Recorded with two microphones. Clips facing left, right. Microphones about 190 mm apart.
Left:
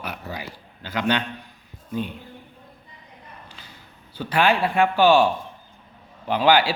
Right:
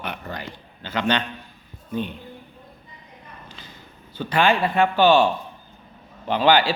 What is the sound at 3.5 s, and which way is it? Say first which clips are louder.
A man's voice: right 3 dB; 10° left (ahead or behind).